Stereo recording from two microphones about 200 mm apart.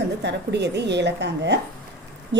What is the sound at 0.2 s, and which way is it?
A woman's voice, 60° right (ahead or behind).